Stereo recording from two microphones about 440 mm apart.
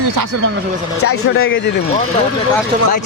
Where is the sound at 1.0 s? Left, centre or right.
Left.